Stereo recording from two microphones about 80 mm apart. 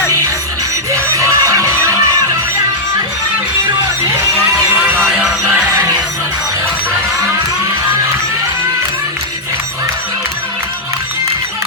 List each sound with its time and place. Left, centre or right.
0.9 s music: right